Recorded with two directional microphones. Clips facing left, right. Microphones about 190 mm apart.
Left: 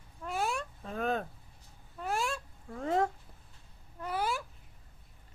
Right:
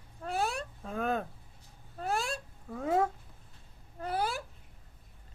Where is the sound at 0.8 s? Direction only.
Centre (ahead or behind).